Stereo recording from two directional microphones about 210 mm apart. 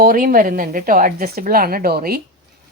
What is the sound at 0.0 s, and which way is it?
A woman's voice, 40° right (ahead or behind).